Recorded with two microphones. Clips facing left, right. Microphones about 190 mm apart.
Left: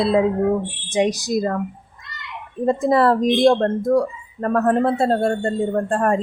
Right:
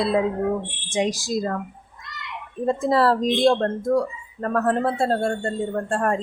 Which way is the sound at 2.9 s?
20° left (ahead or behind).